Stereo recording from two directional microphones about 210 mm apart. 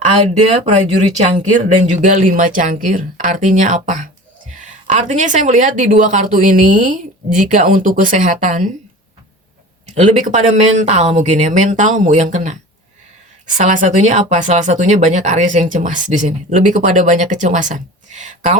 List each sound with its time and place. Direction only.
0.0 s speech: 30° right (ahead or behind)
9.8 s speech: 35° right (ahead or behind)
13.6 s speech: 35° right (ahead or behind)